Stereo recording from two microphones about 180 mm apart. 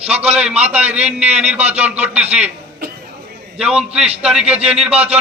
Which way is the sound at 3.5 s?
5° right (ahead or behind).